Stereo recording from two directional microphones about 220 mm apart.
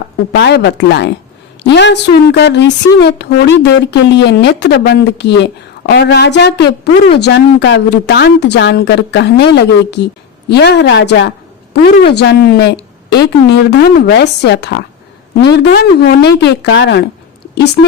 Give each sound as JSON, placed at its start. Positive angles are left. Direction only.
{"t": 0.3, "sound": "a woman's voice", "side_deg": 50}